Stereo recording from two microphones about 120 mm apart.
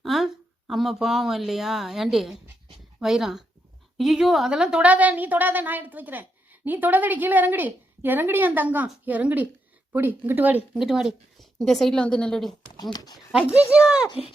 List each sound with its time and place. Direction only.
0.0 s a sound: centre (ahead or behind)
0.7 s a woman's voice: centre (ahead or behind)
10.8 s a woman's voice: 5° right (ahead or behind)
12.7 s speech: 35° left (ahead or behind)
13.5 s a woman's voice: 10° right (ahead or behind)